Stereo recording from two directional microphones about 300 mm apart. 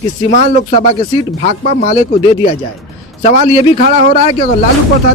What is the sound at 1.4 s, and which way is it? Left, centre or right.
Speech, left.